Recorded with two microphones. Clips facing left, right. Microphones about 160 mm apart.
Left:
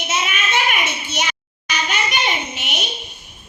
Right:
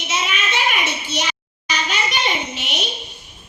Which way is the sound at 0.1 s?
50° left (ahead or behind).